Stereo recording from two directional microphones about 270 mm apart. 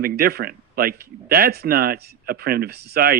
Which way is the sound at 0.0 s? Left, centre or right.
Right.